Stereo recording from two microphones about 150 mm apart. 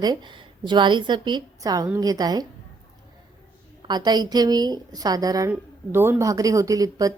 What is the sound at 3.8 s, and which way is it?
A woman's voice, 30° right (ahead or behind).